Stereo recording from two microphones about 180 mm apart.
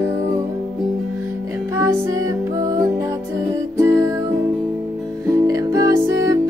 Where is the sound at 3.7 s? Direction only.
15° right (ahead or behind).